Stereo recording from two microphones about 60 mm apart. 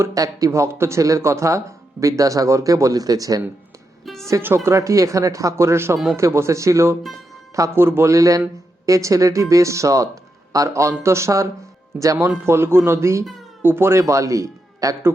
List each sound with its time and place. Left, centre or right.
0.1 s speech: right
4.0 s music: centre
4.4 s speech: right
4.7 s speech: right
7.8 s speech: right
8.1 s speech: right
11.9 s speech: right
12.5 s speech: right
13.6 s speech: right
14.0 s a man's voice: right